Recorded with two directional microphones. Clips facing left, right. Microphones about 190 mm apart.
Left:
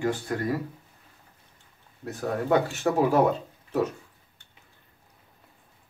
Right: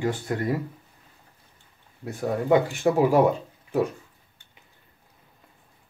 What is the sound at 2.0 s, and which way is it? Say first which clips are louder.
Speech: right 3 dB; 15° right (ahead or behind).